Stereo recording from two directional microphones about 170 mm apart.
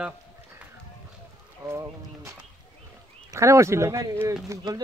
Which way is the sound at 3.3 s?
15° right (ahead or behind).